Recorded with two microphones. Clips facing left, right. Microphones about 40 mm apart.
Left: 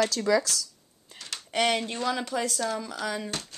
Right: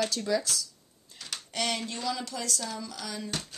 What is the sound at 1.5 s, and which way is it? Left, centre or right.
Speech, left.